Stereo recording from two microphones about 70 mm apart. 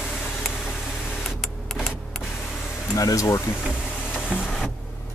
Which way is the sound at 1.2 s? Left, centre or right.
Centre.